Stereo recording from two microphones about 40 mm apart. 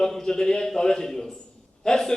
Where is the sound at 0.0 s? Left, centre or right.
Centre.